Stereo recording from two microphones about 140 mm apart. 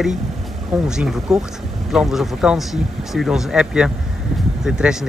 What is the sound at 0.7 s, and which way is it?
Speech, 5° right (ahead or behind).